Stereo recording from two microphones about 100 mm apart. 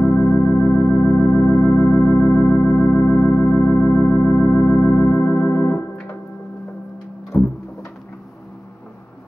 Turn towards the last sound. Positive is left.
turn(degrees=20)  # may be behind; listen again after turning